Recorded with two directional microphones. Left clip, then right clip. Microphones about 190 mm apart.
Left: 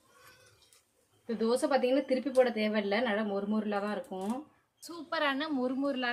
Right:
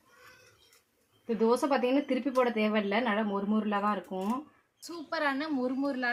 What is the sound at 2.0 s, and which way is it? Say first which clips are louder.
Speech: left 1 dB; 30° right (ahead or behind).